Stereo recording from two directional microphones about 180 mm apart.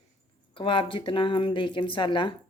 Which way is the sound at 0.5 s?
30° left (ahead or behind).